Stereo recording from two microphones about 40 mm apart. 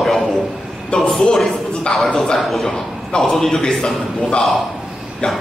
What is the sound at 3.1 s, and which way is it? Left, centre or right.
Speech, left.